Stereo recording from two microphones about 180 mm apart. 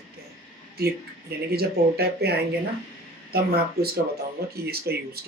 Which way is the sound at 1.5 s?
60° right (ahead or behind).